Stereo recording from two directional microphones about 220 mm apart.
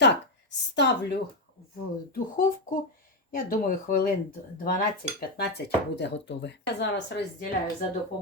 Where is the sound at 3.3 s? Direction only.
40° left (ahead or behind).